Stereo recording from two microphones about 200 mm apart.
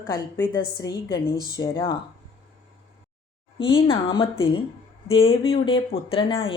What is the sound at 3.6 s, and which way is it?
A woman's voice, 25° left (ahead or behind).